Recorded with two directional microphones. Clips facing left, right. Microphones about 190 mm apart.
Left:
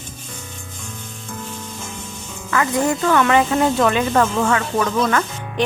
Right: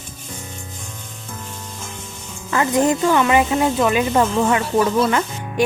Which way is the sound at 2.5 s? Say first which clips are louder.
Right 2 dB; 25° right (ahead or behind).